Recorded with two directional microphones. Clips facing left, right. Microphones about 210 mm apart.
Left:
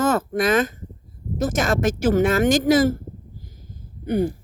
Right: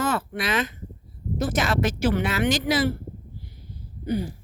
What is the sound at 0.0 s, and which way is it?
A woman's voice, 45° left (ahead or behind).